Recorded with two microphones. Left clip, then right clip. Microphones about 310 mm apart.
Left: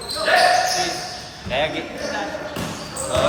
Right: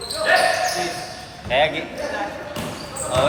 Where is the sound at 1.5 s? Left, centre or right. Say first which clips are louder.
Right 3 dB; right.